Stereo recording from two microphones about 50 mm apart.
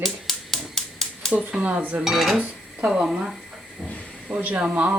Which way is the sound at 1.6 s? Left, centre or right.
Right.